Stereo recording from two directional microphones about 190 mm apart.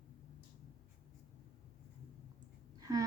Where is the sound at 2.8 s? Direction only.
20° right (ahead or behind).